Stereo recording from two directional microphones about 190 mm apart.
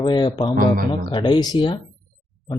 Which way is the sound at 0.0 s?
25° left (ahead or behind).